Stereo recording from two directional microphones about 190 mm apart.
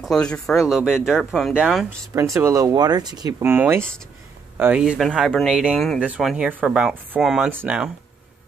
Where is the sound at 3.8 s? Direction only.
5° left (ahead or behind).